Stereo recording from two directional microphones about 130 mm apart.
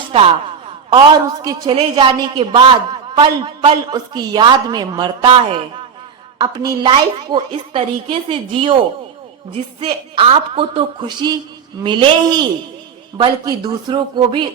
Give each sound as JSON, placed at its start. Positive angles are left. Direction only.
{"t": 0.9, "sound": "a woman's voice", "side_deg": -30}
{"t": 6.4, "sound": "a woman's voice", "side_deg": -30}